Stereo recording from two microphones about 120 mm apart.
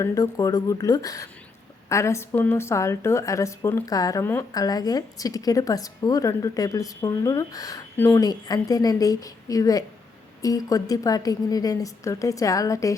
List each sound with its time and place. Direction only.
0.0 s a woman's voice: 30° left (ahead or behind)
7.9 s a woman's voice: 20° left (ahead or behind)
8.2 s a woman's voice: 35° left (ahead or behind)